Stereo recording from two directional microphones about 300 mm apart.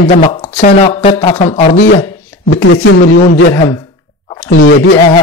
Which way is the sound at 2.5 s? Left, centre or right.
Left.